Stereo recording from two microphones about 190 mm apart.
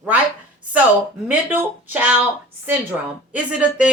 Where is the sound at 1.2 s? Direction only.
10° right (ahead or behind).